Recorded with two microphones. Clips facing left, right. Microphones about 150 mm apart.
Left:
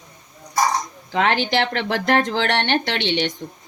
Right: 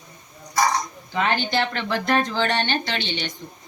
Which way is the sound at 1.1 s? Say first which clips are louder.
Left 3 dB; 90° left.